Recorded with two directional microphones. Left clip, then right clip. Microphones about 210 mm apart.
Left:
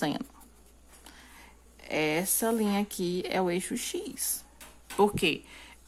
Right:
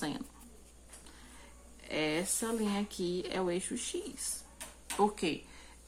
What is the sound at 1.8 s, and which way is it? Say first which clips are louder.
Speech: left 5 dB; 45° left (ahead or behind).